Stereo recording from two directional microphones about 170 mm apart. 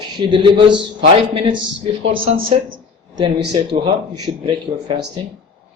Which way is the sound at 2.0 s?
35° right (ahead or behind).